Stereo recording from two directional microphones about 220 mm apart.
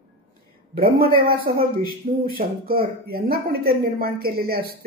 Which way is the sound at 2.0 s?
30° right (ahead or behind).